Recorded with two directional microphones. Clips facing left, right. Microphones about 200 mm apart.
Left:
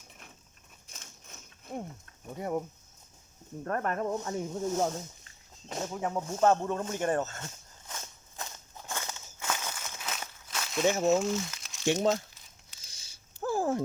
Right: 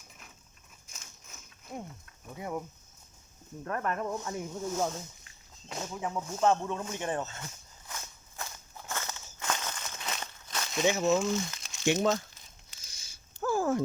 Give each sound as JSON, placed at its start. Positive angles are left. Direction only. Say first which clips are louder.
{"t": 0.9, "sound": "a sound", "louder": "left 2 dB", "side_deg": 35}
{"t": 2.3, "sound": "speech", "louder": "left 4 dB", "side_deg": 40}
{"t": 7.9, "sound": "walk", "louder": "even", "side_deg": 25}
{"t": 11.2, "sound": "speech", "louder": "even", "side_deg": 0}
{"t": 11.9, "sound": "speech", "louder": "even", "side_deg": 30}
{"t": 12.9, "sound": "a sound", "louder": "right 1 dB", "side_deg": 30}